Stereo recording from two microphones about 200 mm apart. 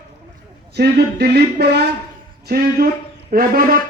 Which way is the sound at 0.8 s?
55° right (ahead or behind).